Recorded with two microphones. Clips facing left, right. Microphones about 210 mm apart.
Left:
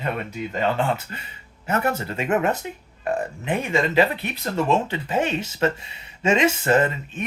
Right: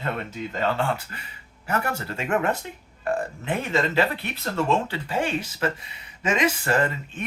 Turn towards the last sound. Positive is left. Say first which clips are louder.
# left 4 dB
turn(degrees=20)  # may be behind; listen again after turning